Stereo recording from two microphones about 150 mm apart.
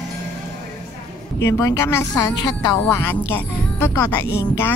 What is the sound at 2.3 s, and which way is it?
Speech, 25° left (ahead or behind).